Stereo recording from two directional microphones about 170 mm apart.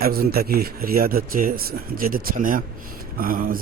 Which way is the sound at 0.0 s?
65° right (ahead or behind).